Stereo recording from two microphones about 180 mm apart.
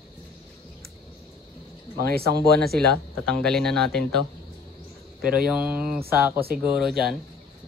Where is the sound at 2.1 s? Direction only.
60° right (ahead or behind).